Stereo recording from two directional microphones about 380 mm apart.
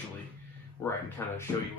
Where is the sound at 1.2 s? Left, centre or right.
Centre.